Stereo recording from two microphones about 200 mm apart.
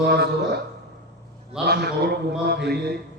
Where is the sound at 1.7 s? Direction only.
55° right (ahead or behind).